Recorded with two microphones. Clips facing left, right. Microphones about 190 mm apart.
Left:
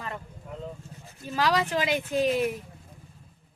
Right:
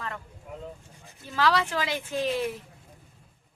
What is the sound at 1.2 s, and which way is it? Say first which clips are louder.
Speech: even; 15° left (ahead or behind).